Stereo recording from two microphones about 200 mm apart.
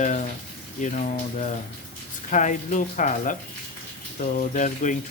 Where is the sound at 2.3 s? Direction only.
40° left (ahead or behind).